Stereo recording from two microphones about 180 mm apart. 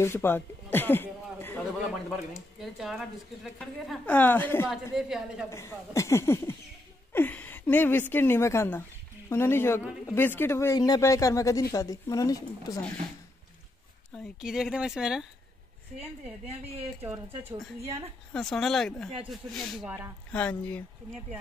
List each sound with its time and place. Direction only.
0.0 s speech: 15° left (ahead or behind)
1.9 s speech: centre (ahead or behind)
4.9 s speech: 5° right (ahead or behind)
5.5 s a woman's voice: 15° left (ahead or behind)
14.1 s speech: 5° right (ahead or behind)
18.3 s speech: centre (ahead or behind)